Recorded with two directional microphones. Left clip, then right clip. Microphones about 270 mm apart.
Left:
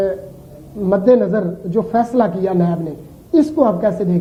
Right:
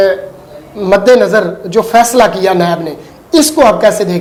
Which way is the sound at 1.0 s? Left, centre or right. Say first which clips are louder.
Right 6 dB; centre.